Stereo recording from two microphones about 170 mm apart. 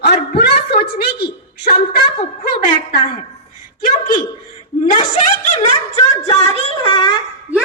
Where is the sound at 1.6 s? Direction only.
65° left (ahead or behind).